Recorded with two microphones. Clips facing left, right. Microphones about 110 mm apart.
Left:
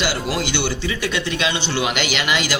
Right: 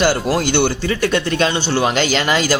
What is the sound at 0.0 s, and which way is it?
Speech, 45° right (ahead or behind).